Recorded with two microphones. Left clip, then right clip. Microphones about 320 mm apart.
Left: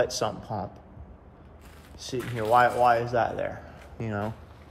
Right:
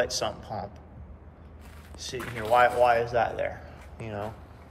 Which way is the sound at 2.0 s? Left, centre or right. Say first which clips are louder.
Left 3 dB; left.